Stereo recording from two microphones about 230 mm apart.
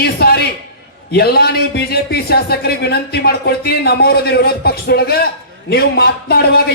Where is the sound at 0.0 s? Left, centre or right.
Left.